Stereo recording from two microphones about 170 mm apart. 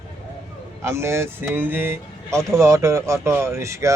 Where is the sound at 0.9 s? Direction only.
15° right (ahead or behind).